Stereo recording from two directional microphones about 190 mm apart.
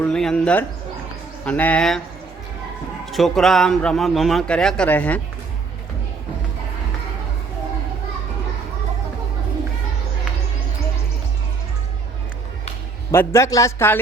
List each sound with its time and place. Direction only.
0.0 s a man's voice: 5° left (ahead or behind)
3.1 s a man's voice: centre (ahead or behind)
13.1 s a man's voice: 15° left (ahead or behind)